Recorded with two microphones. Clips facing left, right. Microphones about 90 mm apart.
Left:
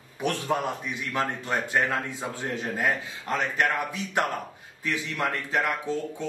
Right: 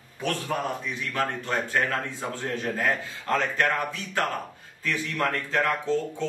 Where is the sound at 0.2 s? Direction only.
15° left (ahead or behind).